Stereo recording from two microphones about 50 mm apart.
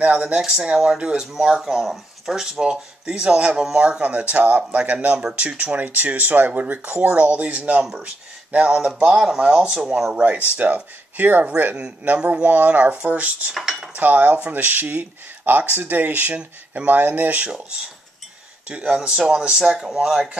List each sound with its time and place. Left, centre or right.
0.0 s speech: right
10.5 s speech: right
11.7 s speech: centre
13.5 s speech: centre
13.9 s speech: right
17.5 s speech: centre